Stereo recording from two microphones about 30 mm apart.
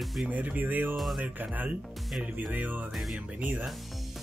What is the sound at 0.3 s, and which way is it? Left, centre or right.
Speech, right.